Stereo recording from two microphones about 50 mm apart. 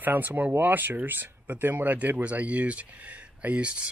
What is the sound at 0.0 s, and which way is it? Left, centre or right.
Speech, right.